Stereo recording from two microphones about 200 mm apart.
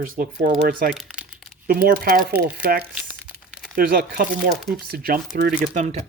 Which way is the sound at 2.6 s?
50° right (ahead or behind).